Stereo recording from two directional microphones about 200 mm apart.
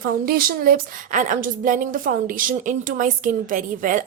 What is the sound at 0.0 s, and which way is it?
A woman's voice, 50° right (ahead or behind).